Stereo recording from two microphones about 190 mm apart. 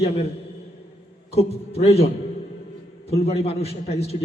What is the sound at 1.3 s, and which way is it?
Speech, 30° left (ahead or behind).